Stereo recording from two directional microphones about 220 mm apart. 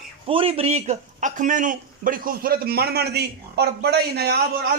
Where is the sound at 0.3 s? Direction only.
25° right (ahead or behind); by 4.4 s 45° right (ahead or behind).